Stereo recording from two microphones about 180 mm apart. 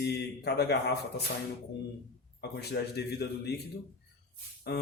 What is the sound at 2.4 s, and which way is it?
Speech, 65° left (ahead or behind).